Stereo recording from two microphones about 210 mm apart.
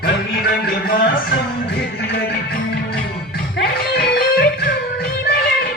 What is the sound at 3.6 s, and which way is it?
Music, 50° left (ahead or behind).